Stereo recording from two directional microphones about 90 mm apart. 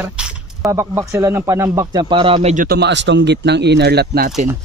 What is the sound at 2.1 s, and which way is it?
Speech, 90° right.